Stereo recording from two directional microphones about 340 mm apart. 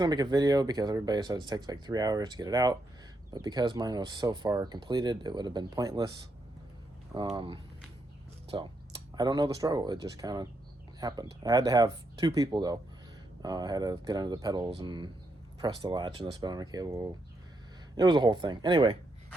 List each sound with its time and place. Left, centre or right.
0.0 s speech: centre
7.3 s speech: centre